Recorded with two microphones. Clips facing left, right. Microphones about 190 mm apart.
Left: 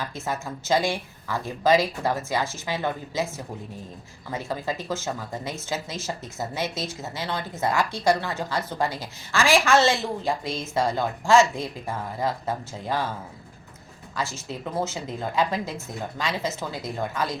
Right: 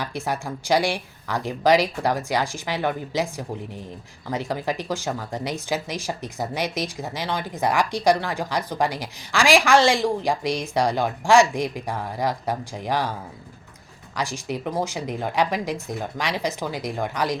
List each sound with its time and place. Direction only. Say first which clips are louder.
0.0 s speech: right 3 dB; 15° right (ahead or behind)
14.2 s speech: right 3 dB; 15° right (ahead or behind)